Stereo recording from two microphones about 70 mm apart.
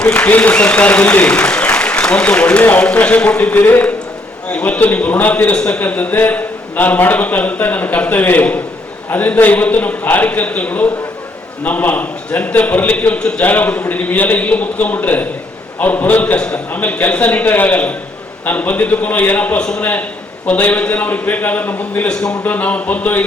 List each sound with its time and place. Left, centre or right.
0.0 s speech: left
13.4 s speech: left
19.5 s a man's voice: centre